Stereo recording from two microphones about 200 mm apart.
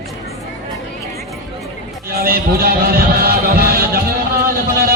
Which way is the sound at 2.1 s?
50° right (ahead or behind).